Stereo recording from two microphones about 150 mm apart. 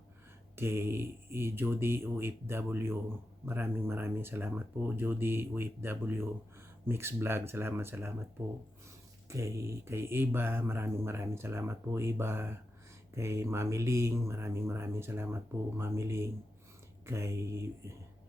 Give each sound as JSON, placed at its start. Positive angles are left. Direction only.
{"t": 0.5, "sound": "speech", "side_deg": -15}
{"t": 9.3, "sound": "speech", "side_deg": -20}